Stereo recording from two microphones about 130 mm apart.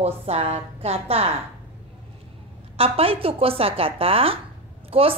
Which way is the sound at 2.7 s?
45° right (ahead or behind).